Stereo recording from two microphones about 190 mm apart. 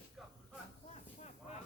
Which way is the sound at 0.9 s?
35° left (ahead or behind).